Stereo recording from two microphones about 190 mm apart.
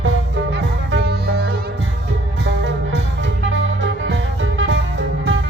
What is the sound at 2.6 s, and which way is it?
Music, 70° right (ahead or behind).